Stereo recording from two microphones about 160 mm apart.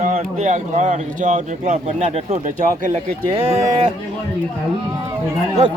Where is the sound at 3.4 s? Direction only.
35° right (ahead or behind).